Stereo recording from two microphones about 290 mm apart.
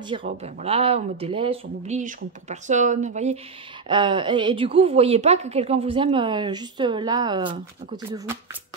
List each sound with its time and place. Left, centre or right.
0.4 s a woman's voice: right